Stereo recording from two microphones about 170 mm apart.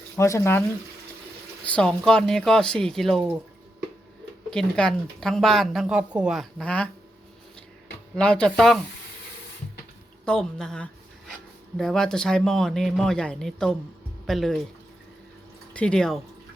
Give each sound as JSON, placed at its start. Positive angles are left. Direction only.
{"t": 0.2, "sound": "speech", "side_deg": 15}
{"t": 1.6, "sound": "speech", "side_deg": 5}
{"t": 4.5, "sound": "speech", "side_deg": 5}
{"t": 8.1, "sound": "speech", "side_deg": 5}
{"t": 10.2, "sound": "speech", "side_deg": 5}
{"t": 15.7, "sound": "speech", "side_deg": 5}